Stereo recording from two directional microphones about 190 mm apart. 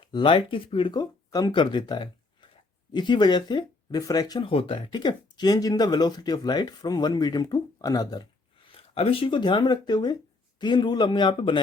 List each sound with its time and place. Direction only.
0.0 s speech: 25° left (ahead or behind)
8.7 s speech: 30° left (ahead or behind)